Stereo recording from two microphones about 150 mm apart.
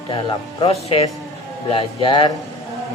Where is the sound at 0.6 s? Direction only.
40° left (ahead or behind).